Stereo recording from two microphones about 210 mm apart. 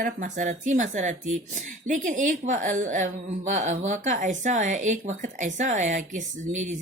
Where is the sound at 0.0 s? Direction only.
35° right (ahead or behind).